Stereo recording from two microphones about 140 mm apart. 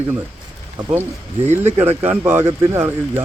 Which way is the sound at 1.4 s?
55° right (ahead or behind).